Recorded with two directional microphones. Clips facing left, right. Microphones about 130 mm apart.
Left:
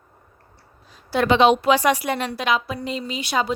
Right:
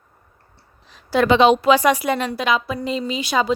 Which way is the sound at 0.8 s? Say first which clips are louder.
Right 4 dB; 90° right.